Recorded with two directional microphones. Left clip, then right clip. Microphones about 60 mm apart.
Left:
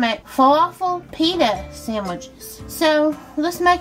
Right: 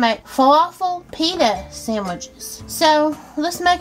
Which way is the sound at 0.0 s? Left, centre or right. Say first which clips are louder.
Right 1 dB; right.